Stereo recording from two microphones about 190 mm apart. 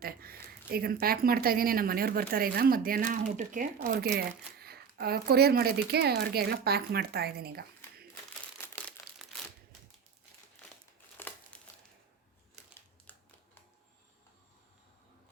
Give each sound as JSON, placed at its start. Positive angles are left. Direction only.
{"t": 0.0, "sound": "speech", "side_deg": -50}
{"t": 7.8, "sound": "crumpling", "side_deg": 15}
{"t": 11.2, "sound": "crumpling", "side_deg": 10}